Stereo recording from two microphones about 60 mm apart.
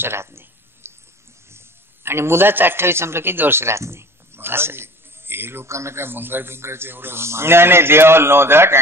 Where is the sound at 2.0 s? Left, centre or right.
Right.